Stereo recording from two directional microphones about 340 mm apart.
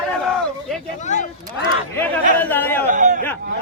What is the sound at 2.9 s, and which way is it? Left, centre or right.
Speech, right.